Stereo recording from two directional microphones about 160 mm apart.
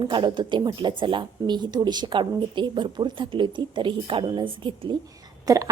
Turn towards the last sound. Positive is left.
turn(degrees=-20)  # may be behind; listen again after turning